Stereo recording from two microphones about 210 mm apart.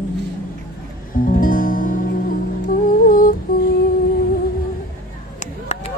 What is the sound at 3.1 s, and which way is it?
Humming, 45° left (ahead or behind).